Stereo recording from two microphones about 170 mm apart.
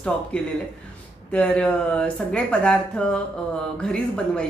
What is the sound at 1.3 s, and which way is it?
Speech, 10° left (ahead or behind).